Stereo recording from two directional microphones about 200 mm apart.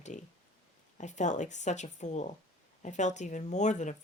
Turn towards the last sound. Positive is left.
turn(degrees=35)  # may be behind; listen again after turning